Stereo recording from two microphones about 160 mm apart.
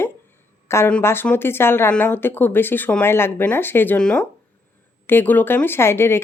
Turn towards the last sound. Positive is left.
turn(degrees=15)  # may be behind; listen again after turning